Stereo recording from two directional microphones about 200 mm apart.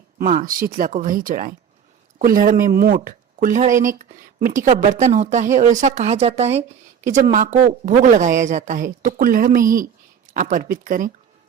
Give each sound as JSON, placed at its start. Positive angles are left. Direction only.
{"t": 0.2, "sound": "a woman's voice", "side_deg": -45}